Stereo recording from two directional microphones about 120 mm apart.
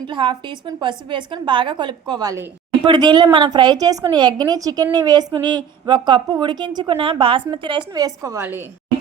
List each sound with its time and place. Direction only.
0.1 s a woman's voice: 40° right (ahead or behind)
6.9 s a woman's voice: 50° right (ahead or behind); by 8.4 s 30° right (ahead or behind)